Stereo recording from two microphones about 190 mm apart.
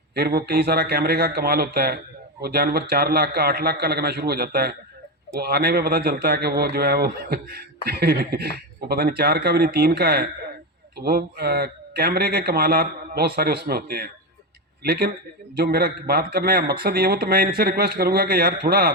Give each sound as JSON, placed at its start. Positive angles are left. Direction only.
{"t": 0.1, "sound": "a man's voice", "side_deg": -55}